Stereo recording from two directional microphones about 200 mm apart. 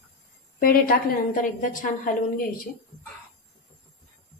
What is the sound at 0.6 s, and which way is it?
Speech, 45° left (ahead or behind).